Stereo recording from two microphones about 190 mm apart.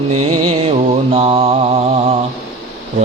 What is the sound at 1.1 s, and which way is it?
Mantra, 30° right (ahead or behind).